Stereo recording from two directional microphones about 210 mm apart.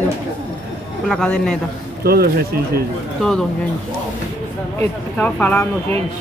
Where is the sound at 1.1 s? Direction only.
5° left (ahead or behind).